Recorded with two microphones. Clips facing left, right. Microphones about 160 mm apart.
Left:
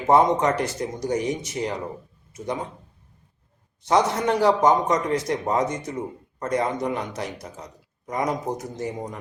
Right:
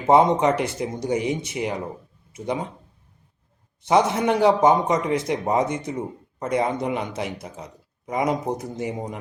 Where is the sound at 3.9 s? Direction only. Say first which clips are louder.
Right 2 dB; 15° right (ahead or behind).